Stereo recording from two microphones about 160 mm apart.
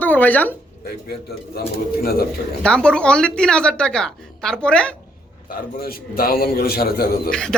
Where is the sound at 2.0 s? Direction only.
70° left (ahead or behind).